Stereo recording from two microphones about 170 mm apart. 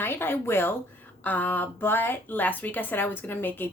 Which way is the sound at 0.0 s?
15° left (ahead or behind).